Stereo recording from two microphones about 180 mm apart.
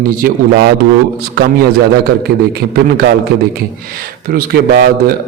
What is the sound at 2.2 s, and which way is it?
A man's voice, 60° right (ahead or behind).